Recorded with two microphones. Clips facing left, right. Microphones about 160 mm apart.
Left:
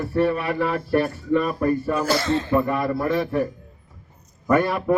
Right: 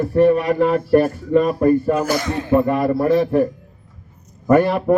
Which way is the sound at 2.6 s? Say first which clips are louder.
Right 6 dB; 30° right (ahead or behind).